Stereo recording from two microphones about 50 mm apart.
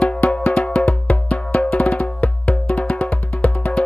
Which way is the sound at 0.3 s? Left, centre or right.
Left.